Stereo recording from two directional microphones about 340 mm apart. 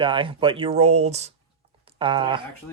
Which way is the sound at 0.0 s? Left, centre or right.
Centre.